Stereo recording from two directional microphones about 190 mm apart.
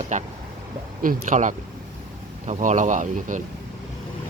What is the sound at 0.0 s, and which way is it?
Speech, 40° right (ahead or behind).